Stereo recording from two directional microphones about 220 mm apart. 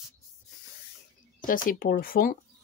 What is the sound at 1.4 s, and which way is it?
Speech, 40° left (ahead or behind).